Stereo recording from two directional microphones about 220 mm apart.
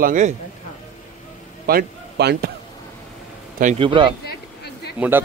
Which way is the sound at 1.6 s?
45° right (ahead or behind).